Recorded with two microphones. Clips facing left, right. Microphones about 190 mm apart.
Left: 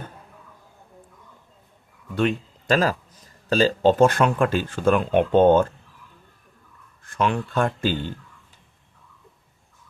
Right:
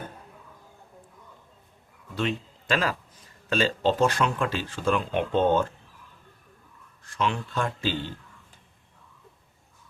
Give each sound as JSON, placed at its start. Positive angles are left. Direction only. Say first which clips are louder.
{"t": 2.1, "sound": "a sound", "louder": "left 6 dB", "side_deg": 45}
{"t": 3.9, "sound": "speech", "louder": "left 6 dB", "side_deg": 55}
{"t": 7.0, "sound": "speech", "louder": "left 5 dB", "side_deg": 55}